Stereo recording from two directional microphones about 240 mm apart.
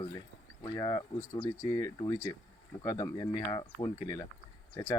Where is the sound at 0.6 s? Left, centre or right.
Centre.